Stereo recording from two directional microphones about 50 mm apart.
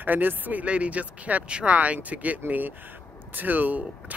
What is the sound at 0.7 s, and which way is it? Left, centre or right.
Speech, right.